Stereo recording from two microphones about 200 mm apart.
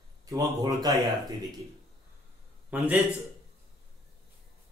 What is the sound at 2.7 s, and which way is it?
Speech, 5° right (ahead or behind).